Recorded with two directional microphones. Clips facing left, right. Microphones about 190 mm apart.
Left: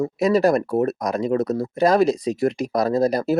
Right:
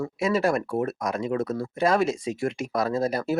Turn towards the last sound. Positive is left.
turn(degrees=40)  # may be behind; listen again after turning